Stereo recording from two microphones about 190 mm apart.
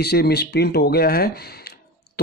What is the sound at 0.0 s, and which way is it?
A man's voice, 60° left (ahead or behind).